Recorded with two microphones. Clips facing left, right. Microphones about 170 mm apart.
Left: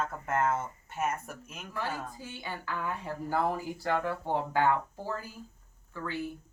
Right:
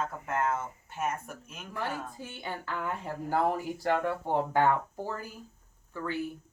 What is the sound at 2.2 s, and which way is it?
Speech, 25° right (ahead or behind).